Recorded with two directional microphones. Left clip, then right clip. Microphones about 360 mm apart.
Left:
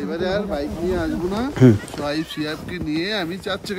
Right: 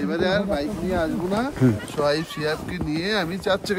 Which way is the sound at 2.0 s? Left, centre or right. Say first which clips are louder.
Right 3 dB; centre.